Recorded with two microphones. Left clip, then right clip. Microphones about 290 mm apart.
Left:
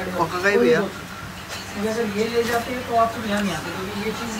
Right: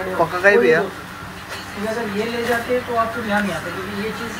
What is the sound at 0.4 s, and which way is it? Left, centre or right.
Speech, centre.